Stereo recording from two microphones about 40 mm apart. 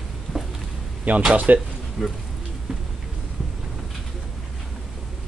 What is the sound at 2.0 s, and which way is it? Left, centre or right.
Speech, centre.